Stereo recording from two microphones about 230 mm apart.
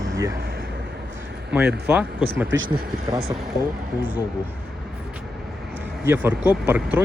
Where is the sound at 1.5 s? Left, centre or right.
Centre.